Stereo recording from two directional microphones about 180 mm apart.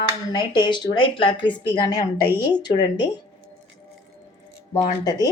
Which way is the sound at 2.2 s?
10° right (ahead or behind).